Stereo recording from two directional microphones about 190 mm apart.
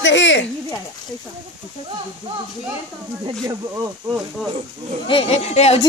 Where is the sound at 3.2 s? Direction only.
20° right (ahead or behind).